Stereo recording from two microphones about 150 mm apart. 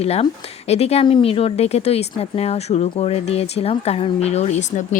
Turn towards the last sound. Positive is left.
turn(degrees=50)  # may be behind; listen again after turning